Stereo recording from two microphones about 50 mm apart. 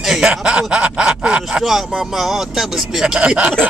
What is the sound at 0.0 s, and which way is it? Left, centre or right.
Snicker, centre.